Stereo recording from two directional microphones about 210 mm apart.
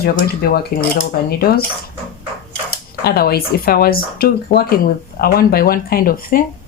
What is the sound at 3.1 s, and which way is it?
Speech, 45° left (ahead or behind).